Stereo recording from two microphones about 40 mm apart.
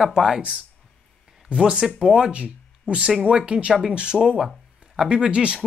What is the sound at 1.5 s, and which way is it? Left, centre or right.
Speech, right.